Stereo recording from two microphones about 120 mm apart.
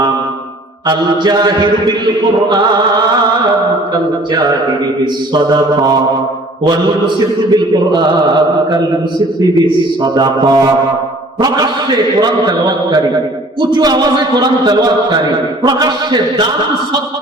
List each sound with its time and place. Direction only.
0.9 s a man's voice: 35° right (ahead or behind)
7.5 s a man's voice: 35° right (ahead or behind)